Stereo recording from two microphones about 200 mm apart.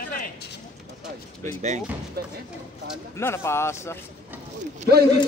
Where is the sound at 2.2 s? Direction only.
50° right (ahead or behind).